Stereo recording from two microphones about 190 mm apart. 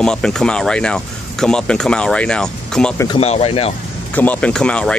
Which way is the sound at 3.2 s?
35° left (ahead or behind).